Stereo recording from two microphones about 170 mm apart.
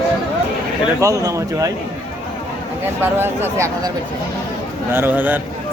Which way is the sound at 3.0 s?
15° right (ahead or behind).